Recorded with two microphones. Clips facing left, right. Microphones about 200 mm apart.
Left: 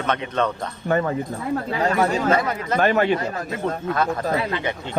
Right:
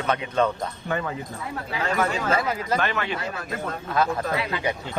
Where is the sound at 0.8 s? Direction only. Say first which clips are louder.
Left 9 dB; 40° left (ahead or behind).